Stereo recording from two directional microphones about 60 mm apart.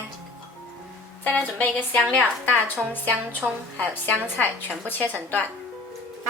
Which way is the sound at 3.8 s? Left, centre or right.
Left.